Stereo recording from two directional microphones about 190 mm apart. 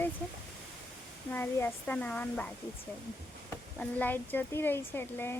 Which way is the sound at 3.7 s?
10° left (ahead or behind).